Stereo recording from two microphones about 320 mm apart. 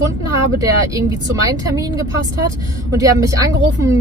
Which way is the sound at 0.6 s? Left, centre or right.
Centre.